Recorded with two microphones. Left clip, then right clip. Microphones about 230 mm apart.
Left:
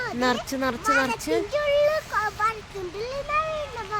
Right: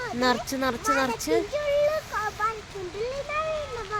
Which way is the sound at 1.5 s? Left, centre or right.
Left.